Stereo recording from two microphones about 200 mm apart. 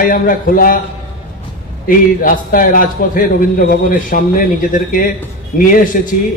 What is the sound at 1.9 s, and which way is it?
A man's voice, 45° left (ahead or behind).